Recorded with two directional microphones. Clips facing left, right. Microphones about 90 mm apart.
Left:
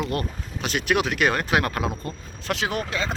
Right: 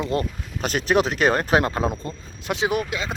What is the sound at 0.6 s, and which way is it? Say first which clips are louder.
Speech: right 3 dB; 40° right (ahead or behind).